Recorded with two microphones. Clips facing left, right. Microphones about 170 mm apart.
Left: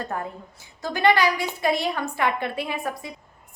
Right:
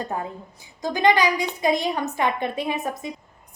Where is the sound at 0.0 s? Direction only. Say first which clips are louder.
Right 1 dB; 20° right (ahead or behind).